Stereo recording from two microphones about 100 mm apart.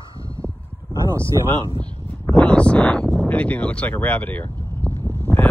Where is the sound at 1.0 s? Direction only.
30° right (ahead or behind).